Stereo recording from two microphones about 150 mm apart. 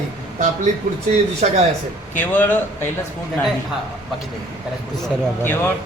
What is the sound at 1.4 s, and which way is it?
Speech, 55° right (ahead or behind).